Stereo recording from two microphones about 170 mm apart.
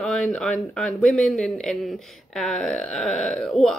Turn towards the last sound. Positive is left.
turn(degrees=0)  # may be behind; listen again after turning